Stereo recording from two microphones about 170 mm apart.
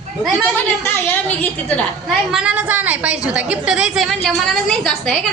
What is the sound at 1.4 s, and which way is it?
Speech, 10° left (ahead or behind).